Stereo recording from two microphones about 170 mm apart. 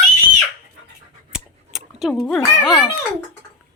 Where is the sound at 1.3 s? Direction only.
Centre (ahead or behind).